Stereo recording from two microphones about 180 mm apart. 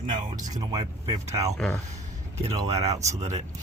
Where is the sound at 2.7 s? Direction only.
35° right (ahead or behind).